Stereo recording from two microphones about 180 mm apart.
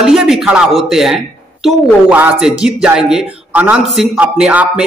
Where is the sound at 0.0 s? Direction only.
Centre (ahead or behind).